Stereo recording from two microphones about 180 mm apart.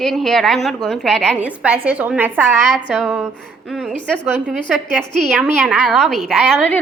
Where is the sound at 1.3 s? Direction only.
10° right (ahead or behind).